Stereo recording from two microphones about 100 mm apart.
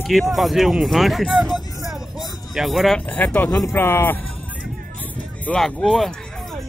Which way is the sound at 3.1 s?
15° left (ahead or behind).